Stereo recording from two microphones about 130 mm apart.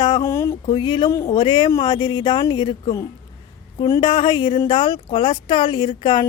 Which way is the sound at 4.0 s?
40° left (ahead or behind).